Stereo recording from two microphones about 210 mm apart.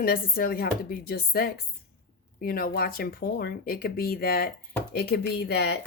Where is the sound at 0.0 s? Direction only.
45° left (ahead or behind).